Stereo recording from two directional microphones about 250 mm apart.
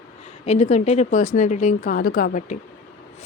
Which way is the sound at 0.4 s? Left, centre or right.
Left.